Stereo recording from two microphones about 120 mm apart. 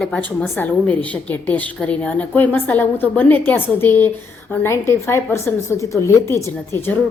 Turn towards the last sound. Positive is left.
turn(degrees=20)  # may be behind; listen again after turning